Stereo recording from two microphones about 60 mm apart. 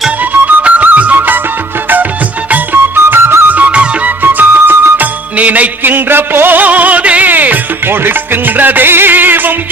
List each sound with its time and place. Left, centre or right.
0.4 s music: right
2.5 s music: right
3.5 s flute: right
4.2 s music: right
5.4 s a sound: right